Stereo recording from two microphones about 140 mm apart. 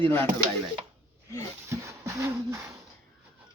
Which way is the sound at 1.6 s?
20° right (ahead or behind).